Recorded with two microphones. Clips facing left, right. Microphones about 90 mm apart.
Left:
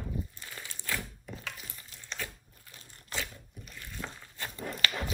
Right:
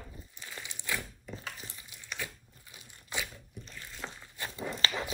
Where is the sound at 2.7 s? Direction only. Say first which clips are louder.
Even; 15° right (ahead or behind).